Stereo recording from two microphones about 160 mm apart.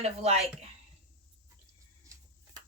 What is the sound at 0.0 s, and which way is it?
Speech, 40° right (ahead or behind).